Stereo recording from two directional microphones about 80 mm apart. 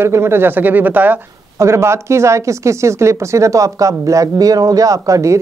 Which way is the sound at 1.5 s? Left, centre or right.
Right.